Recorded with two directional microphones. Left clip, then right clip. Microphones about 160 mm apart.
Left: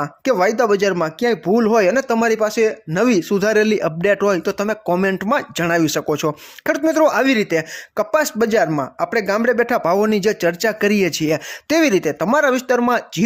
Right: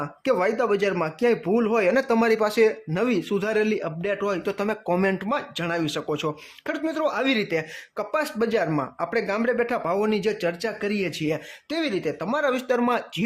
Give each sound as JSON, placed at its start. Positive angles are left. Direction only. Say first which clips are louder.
{"t": 0.0, "sound": "speech", "louder": "left 6 dB", "side_deg": 30}
{"t": 0.9, "sound": "speech", "louder": "left 4 dB", "side_deg": 20}
{"t": 1.9, "sound": "speech", "louder": "left 4 dB", "side_deg": 20}
{"t": 2.9, "sound": "speech", "louder": "left 7 dB", "side_deg": 30}
{"t": 5.2, "sound": "speech", "louder": "left 8 dB", "side_deg": 40}